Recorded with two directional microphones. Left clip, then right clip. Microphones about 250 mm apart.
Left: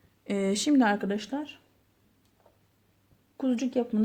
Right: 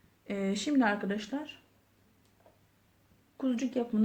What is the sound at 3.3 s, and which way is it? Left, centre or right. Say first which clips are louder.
Speech: left 4 dB; left.